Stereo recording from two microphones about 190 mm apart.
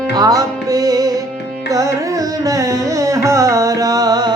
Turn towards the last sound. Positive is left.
turn(degrees=-20)  # may be behind; listen again after turning